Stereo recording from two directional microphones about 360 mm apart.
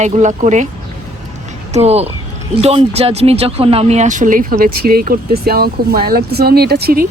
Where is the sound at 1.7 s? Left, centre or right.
Centre.